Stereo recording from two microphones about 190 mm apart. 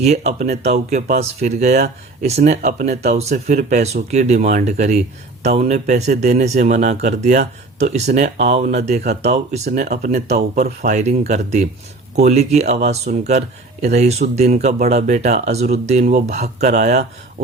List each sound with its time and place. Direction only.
0.0 s speech: 35° right (ahead or behind)